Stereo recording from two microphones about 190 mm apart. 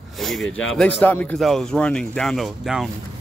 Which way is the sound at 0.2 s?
Centre (ahead or behind).